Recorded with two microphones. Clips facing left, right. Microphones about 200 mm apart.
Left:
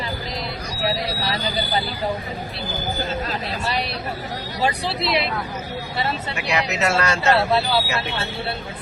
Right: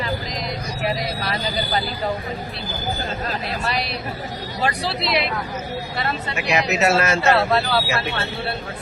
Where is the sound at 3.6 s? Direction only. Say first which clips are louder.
Left 1 dB; 30° left (ahead or behind).